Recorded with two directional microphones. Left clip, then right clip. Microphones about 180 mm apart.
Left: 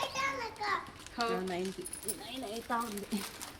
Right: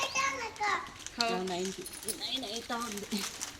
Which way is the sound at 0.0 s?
40° right (ahead or behind).